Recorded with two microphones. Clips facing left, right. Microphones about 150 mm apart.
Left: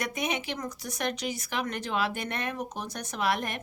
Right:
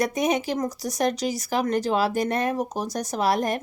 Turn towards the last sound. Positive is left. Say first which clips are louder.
# right 6 dB
turn(degrees=-40)  # may be behind; listen again after turning